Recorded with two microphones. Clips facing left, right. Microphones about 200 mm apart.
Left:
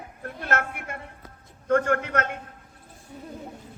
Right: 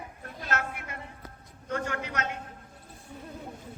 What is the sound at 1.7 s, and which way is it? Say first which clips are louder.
Speech: left 10 dB; 55° left (ahead or behind).